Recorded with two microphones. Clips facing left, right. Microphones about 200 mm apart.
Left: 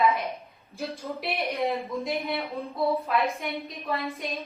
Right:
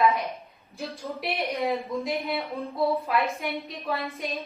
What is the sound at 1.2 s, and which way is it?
A woman's voice, centre (ahead or behind).